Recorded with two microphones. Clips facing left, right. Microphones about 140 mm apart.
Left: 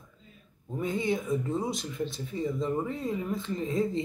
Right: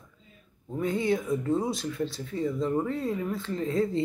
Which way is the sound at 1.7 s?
20° left (ahead or behind).